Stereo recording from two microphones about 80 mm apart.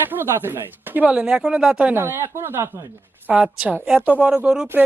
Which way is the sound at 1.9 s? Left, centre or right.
Right.